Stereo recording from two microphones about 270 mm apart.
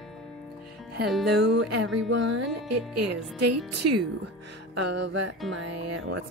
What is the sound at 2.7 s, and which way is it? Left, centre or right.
Speech, right.